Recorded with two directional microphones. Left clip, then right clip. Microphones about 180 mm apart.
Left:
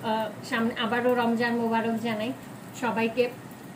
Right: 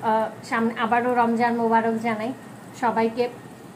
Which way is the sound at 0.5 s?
20° right (ahead or behind).